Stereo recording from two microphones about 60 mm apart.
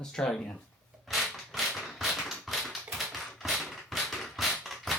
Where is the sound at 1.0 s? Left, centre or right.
Centre.